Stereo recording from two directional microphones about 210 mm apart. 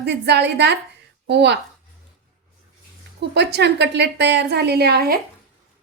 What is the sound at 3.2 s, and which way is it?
A woman's voice, 50° right (ahead or behind).